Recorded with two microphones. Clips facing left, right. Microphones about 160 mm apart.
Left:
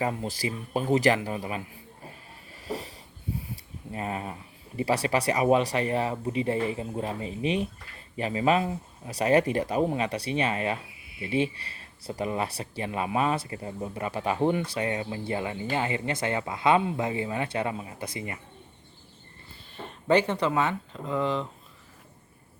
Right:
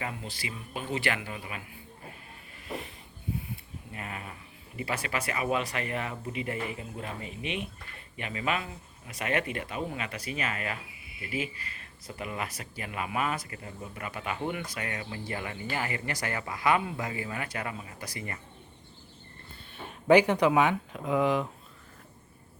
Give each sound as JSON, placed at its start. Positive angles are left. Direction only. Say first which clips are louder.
{"t": 0.0, "sound": "speech", "louder": "left 8 dB", "side_deg": 40}
{"t": 2.7, "sound": "a sound", "louder": "left 4 dB", "side_deg": 40}
{"t": 3.9, "sound": "speech", "louder": "left 8 dB", "side_deg": 30}
{"t": 19.7, "sound": "speech", "louder": "right 2 dB", "side_deg": -5}